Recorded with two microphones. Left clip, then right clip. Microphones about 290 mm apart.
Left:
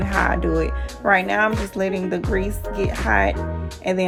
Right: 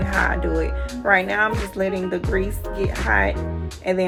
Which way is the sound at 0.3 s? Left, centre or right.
Left.